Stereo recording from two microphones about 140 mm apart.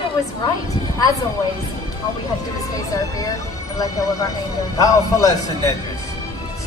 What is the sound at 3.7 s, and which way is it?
A man's voice, 25° left (ahead or behind).